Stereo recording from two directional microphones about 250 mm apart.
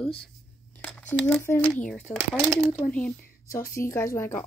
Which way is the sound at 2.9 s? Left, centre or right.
Centre.